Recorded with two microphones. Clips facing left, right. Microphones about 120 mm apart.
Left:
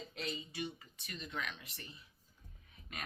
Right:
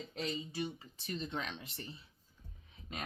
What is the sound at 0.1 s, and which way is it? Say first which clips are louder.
Speech: right 5 dB; 35° right (ahead or behind).